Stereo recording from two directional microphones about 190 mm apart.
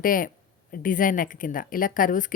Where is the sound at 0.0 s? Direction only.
45° left (ahead or behind).